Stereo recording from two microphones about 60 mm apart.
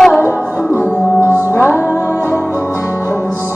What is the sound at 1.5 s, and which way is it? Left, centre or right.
Music, left.